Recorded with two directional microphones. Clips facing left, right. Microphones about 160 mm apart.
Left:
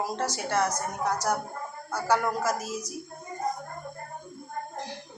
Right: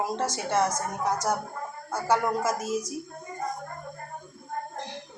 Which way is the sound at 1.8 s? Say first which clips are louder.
Right 1 dB; 25° right (ahead or behind).